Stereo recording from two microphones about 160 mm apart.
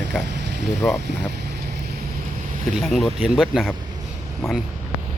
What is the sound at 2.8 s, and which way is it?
Speech, centre (ahead or behind).